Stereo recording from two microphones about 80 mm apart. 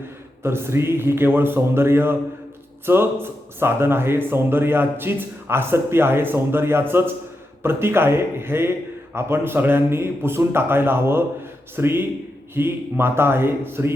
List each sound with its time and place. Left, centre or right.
0.4 s speech: right